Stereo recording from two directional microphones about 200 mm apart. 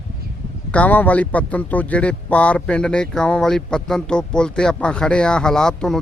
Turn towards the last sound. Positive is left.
turn(degrees=5)  # may be behind; listen again after turning